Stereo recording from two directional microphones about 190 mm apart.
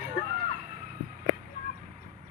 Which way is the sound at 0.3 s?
45° right (ahead or behind).